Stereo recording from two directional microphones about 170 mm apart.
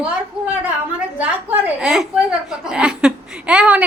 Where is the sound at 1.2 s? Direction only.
5° right (ahead or behind).